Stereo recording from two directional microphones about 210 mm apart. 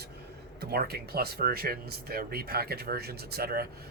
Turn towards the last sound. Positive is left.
turn(degrees=-45)  # may be behind; listen again after turning